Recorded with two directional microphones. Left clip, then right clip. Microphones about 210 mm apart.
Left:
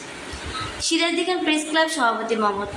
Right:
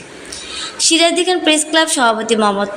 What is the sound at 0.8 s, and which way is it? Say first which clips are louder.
A woman's voice: right 10 dB; 40° right (ahead or behind).